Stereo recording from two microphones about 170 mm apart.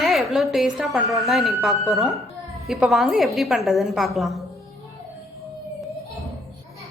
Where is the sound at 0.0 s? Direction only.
Centre (ahead or behind).